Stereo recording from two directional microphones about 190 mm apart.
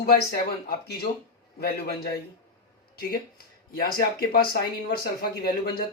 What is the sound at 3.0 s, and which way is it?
Speech, 50° left (ahead or behind).